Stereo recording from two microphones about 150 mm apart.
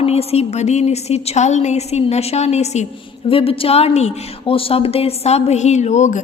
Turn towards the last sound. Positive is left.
turn(degrees=55)  # may be behind; listen again after turning